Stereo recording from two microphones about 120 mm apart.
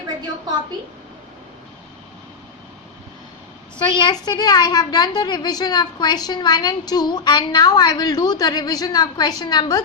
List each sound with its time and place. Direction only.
3.8 s a woman's voice: 40° left (ahead or behind)